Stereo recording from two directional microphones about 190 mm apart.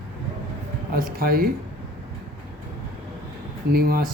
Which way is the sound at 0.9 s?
50° right (ahead or behind).